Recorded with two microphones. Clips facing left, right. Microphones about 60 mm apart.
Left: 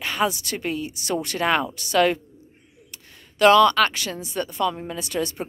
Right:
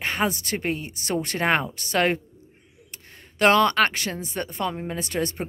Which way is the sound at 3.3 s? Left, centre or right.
Right.